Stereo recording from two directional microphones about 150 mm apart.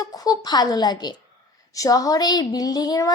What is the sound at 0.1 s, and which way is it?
A woman's voice, 25° left (ahead or behind).